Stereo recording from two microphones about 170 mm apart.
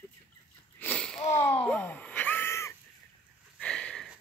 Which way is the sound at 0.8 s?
5° left (ahead or behind).